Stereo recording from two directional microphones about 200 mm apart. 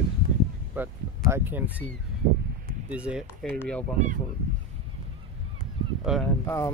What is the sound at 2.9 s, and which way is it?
Speech, 5° right (ahead or behind).